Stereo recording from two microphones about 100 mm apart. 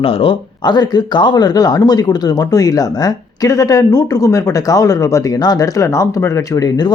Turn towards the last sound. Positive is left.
turn(degrees=40)  # may be behind; listen again after turning